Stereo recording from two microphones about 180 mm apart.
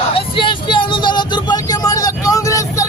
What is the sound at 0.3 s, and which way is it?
Vehicle, 25° left (ahead or behind).